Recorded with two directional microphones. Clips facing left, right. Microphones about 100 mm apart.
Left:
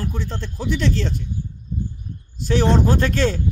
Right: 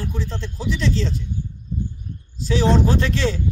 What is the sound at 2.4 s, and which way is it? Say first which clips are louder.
A man's voice: even; 50° left (ahead or behind).